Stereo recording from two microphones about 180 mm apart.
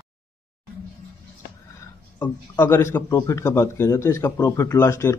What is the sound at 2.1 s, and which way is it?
A man's voice, 10° left (ahead or behind).